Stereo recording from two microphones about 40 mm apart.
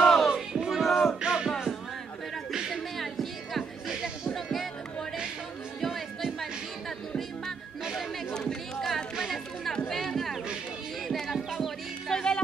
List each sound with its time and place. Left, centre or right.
0.0 s music: centre
0.6 s music: centre
0.8 s music: centre
1.2 s music: centre
3.0 s music: centre
5.8 s chatter: centre
8.3 s chatter: centre
10.1 s a sound: centre
11.2 s music: centre
12.1 s music: centre